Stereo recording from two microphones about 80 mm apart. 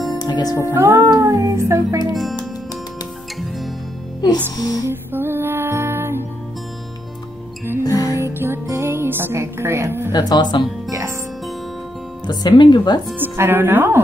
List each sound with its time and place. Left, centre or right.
0.2 s music: left
0.7 s music: right
4.6 s speech: left
4.8 s music: right
7.8 s music: left
8.2 s music: right
10.1 s speech: left
10.9 s music: right
12.3 s speech: left
13.2 s a woman's voice: right